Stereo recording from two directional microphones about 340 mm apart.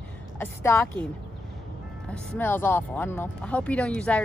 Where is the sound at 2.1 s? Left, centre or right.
Centre.